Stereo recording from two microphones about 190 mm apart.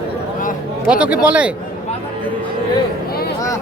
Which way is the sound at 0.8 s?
5° right (ahead or behind).